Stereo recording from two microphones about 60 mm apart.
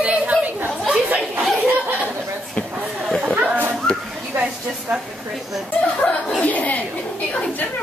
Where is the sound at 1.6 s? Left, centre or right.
Right.